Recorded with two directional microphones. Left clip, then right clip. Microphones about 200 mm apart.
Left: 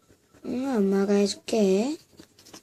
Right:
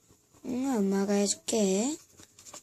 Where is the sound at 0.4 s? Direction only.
5° right (ahead or behind).